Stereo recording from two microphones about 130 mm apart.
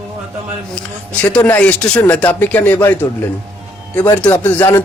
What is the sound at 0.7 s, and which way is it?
Speech, 10° left (ahead or behind).